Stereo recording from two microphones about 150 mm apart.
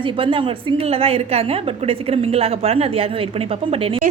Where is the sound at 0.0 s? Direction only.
35° right (ahead or behind).